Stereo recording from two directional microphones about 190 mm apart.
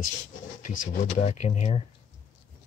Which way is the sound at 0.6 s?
40° left (ahead or behind).